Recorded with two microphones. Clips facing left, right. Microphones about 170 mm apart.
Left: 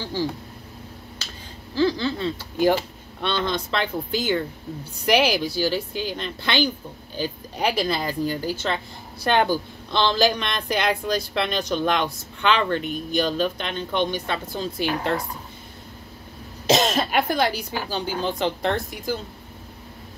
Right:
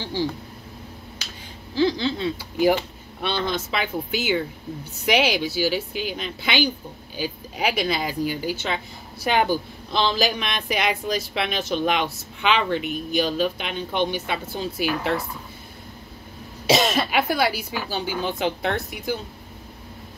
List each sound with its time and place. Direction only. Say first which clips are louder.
0.0 s a woman's voice: even; 20° right (ahead or behind)
1.8 s a woman's voice: even; 15° right (ahead or behind)
16.6 s speech: even; 5° right (ahead or behind)